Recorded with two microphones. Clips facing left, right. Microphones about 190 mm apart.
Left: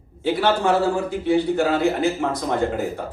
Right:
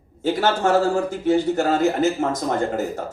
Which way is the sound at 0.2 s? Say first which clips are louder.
Even; 45° right (ahead or behind).